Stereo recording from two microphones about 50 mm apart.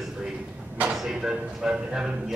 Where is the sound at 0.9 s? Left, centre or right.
Centre.